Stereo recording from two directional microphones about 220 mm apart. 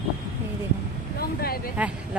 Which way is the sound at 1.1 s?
45° left (ahead or behind).